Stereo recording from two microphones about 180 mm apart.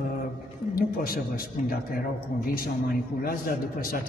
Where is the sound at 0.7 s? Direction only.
55° left (ahead or behind).